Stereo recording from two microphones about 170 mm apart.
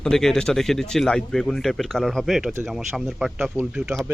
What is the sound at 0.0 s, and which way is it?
Speech, 5° left (ahead or behind).